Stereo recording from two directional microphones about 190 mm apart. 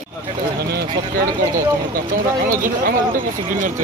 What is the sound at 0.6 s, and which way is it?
Speech, 55° right (ahead or behind).